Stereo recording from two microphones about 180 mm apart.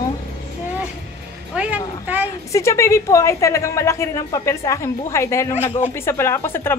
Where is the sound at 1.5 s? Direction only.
5° right (ahead or behind).